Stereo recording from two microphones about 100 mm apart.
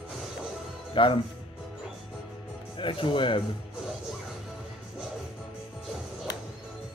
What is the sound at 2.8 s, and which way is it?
Speech, 55° left (ahead or behind).